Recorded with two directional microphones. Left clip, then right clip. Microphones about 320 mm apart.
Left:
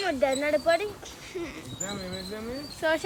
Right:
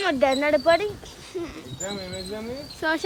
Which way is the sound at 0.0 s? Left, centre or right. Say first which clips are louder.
Right 5 dB; right.